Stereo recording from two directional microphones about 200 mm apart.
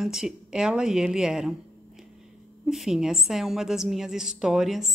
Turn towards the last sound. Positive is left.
turn(degrees=0)  # may be behind; listen again after turning